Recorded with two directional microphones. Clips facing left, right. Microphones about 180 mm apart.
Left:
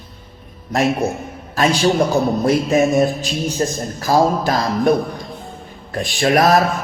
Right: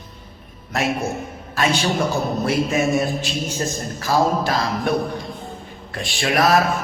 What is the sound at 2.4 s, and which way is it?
Speech, 40° left (ahead or behind).